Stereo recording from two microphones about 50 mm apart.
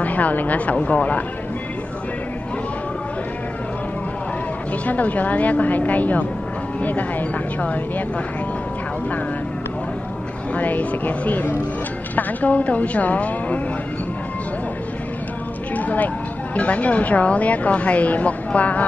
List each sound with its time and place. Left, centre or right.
0.0 s a woman's voice: left
4.8 s a woman's voice: left
10.5 s a woman's voice: left
15.7 s a sound: left
16.5 s speech: left